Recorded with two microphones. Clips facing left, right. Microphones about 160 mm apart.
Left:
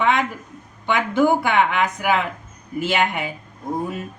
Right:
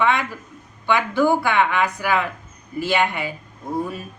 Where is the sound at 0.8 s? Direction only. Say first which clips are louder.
Left 1 dB; 20° left (ahead or behind).